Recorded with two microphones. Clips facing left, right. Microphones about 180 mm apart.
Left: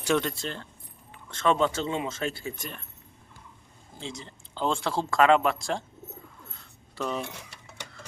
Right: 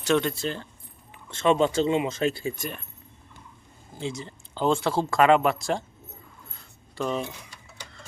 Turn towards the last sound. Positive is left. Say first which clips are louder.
# right 3 dB
turn(degrees=0)  # may be behind; listen again after turning